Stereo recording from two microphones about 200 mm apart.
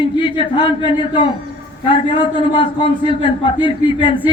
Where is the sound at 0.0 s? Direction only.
25° left (ahead or behind).